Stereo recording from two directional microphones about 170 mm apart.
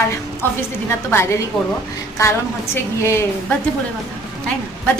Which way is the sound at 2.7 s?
15° left (ahead or behind).